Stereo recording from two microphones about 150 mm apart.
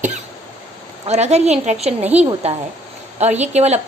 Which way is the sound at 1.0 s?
45° right (ahead or behind).